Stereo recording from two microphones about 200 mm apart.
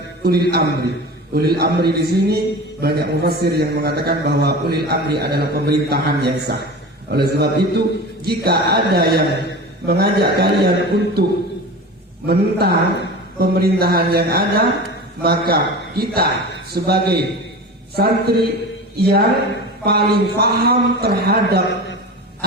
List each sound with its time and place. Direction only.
0.3 s a man's voice: 50° right (ahead or behind)
12.2 s a man's voice: 50° right (ahead or behind)